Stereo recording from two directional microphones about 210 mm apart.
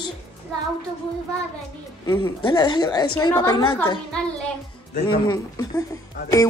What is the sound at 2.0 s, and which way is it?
A woman's voice, 20° left (ahead or behind).